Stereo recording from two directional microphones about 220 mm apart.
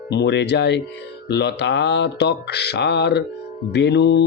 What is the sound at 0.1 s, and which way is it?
Speech, 50° left (ahead or behind).